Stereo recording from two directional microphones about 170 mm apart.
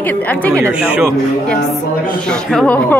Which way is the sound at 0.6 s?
5° right (ahead or behind).